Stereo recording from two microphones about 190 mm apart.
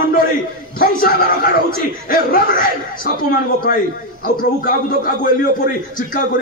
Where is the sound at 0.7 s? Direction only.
50° left (ahead or behind).